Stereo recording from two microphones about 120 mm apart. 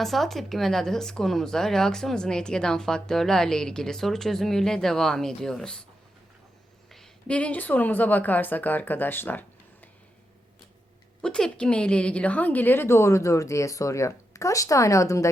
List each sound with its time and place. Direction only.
0.0 s speech: centre (ahead or behind)
6.9 s a woman's voice: 5° left (ahead or behind)
11.2 s a woman's voice: 5° left (ahead or behind); by 15.3 s 25° left (ahead or behind)